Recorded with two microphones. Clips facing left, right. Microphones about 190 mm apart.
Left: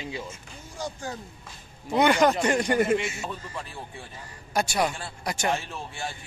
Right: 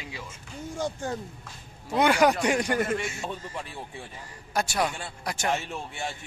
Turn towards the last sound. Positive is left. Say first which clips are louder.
# left 2 dB
turn(degrees=0)  # may be behind; listen again after turning